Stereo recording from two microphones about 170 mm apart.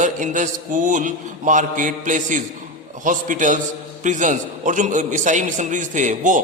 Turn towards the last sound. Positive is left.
turn(degrees=-50)  # may be behind; listen again after turning